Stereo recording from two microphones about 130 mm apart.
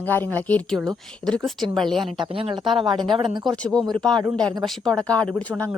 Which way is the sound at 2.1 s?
40° right (ahead or behind).